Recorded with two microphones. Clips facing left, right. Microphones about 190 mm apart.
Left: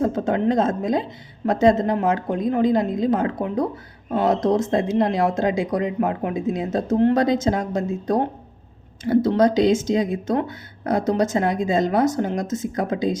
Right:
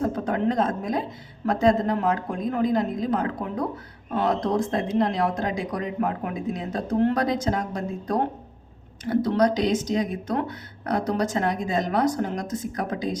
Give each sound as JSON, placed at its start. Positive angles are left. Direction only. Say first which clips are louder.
{"t": 0.0, "sound": "a woman's voice", "louder": "left 4 dB", "side_deg": 25}
{"t": 9.2, "sound": "speech", "louder": "left 4 dB", "side_deg": 25}